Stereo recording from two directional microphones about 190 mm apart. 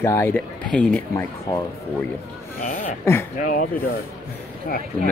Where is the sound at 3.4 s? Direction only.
45° left (ahead or behind).